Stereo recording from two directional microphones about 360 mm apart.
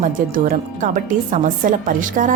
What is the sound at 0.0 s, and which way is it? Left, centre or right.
A woman's voice, right.